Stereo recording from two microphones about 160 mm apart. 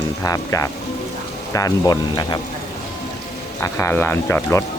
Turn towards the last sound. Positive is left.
turn(degrees=15)  # may be behind; listen again after turning